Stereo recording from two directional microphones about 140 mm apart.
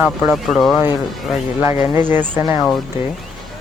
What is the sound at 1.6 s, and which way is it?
Speech, 20° right (ahead or behind).